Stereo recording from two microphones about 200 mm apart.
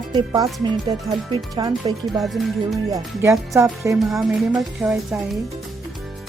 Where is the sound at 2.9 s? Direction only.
15° right (ahead or behind).